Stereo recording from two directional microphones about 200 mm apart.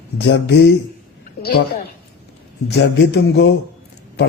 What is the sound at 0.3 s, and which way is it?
Speech, 60° left (ahead or behind).